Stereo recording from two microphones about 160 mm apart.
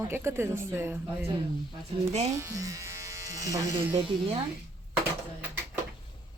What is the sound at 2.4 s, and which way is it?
Speech, 20° right (ahead or behind).